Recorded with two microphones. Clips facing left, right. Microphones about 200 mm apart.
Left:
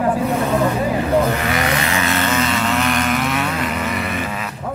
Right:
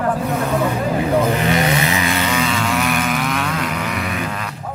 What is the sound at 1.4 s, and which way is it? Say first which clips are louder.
Vehicle: right 2 dB; 20° right (ahead or behind).